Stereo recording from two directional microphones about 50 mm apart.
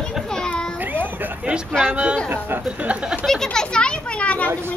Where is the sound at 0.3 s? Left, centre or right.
Centre.